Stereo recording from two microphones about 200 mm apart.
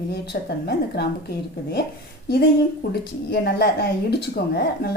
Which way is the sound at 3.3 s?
55° left (ahead or behind).